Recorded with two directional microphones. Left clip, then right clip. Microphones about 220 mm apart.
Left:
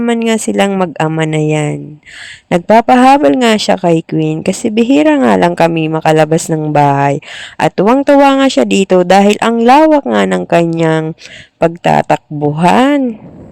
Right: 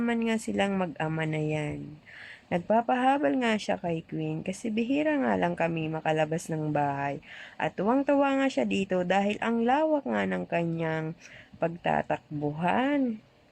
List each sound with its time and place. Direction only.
0.0 s speech: 45° left (ahead or behind)